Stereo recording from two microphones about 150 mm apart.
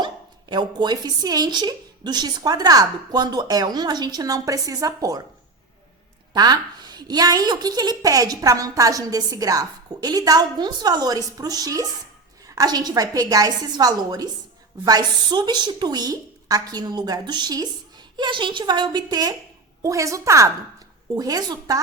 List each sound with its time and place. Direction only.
0.5 s a woman's voice: 30° right (ahead or behind)
6.3 s a woman's voice: 25° right (ahead or behind)